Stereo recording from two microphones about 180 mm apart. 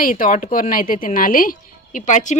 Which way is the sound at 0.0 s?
50° left (ahead or behind).